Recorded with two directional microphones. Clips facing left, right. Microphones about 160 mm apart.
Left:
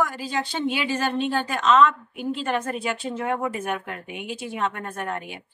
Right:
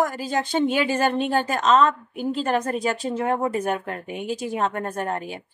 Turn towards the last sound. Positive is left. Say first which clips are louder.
# right 4 dB
turn(degrees=-35)  # may be behind; listen again after turning